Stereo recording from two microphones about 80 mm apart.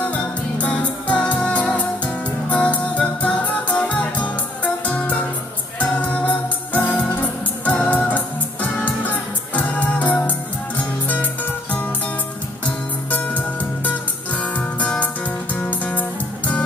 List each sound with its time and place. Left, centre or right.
0.0 s music: centre
12.6 s music: centre